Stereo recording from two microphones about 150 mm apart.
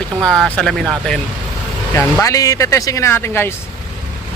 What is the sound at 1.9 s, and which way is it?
Speech, 20° left (ahead or behind).